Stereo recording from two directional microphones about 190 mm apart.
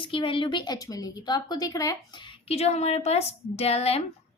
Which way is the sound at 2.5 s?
35° left (ahead or behind).